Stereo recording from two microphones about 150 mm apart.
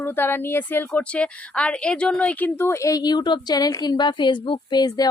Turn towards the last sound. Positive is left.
turn(degrees=25)  # may be behind; listen again after turning